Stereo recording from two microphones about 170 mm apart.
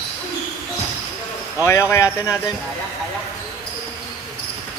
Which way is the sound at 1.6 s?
15° left (ahead or behind).